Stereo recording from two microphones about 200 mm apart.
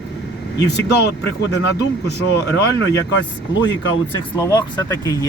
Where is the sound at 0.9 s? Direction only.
55° left (ahead or behind).